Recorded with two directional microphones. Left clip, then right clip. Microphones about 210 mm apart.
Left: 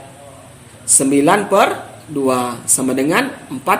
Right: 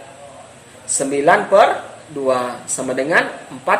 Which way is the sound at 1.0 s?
40° left (ahead or behind).